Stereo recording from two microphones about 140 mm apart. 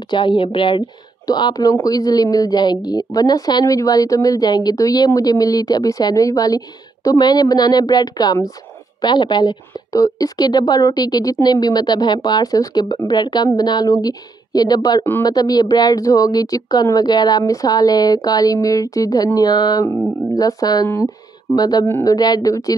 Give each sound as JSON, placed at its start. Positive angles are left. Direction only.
{"t": 0.1, "sound": "speech", "side_deg": 35}
{"t": 21.8, "sound": "speech", "side_deg": 15}
{"t": 22.1, "sound": "speech", "side_deg": 30}